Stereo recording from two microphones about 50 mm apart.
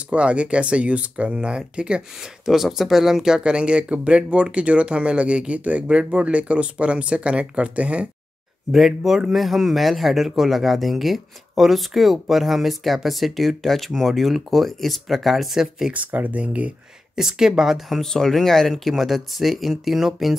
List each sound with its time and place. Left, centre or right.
0.1 s speech: right
2.4 s speech: centre; by 8.1 s right
8.7 s speech: centre
15.9 s speech: right
17.1 s speech: centre
18.0 s speech: centre